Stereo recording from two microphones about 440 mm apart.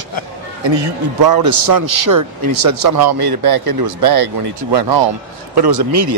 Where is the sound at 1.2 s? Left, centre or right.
Right.